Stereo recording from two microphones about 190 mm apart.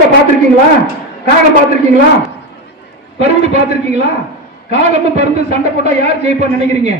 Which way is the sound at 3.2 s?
35° right (ahead or behind).